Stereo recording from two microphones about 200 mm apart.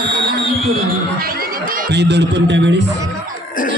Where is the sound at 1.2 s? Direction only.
45° right (ahead or behind); by 2.8 s 60° right (ahead or behind).